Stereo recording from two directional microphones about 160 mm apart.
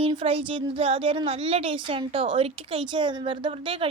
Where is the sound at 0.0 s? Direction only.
35° right (ahead or behind).